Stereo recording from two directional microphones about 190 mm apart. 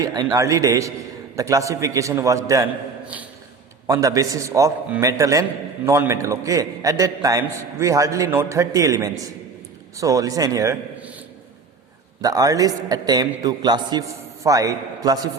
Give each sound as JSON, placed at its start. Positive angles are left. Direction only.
{"t": 0.0, "sound": "a man's voice", "side_deg": -20}
{"t": 3.8, "sound": "a man's voice", "side_deg": -15}
{"t": 12.2, "sound": "a man's voice", "side_deg": -20}